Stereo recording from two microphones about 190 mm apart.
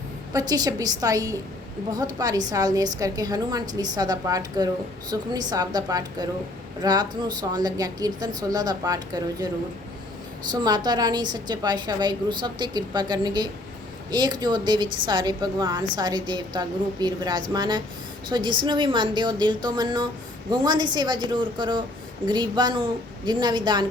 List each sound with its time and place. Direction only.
0.3 s a woman's voice: 20° right (ahead or behind)
10.5 s a woman's voice: 20° right (ahead or behind)